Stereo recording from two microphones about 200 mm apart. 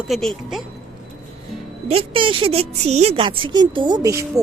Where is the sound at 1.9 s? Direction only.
25° right (ahead or behind).